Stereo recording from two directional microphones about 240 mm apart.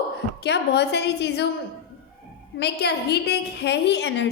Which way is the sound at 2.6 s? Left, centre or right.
Left.